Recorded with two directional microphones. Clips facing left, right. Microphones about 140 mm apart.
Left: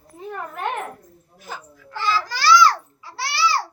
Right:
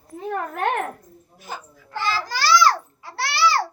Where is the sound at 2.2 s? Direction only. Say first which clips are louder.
Left 2 dB; 45° right (ahead or behind).